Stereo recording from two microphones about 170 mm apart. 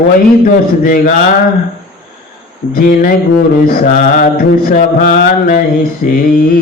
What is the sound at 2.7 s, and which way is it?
Mantra, 55° left (ahead or behind).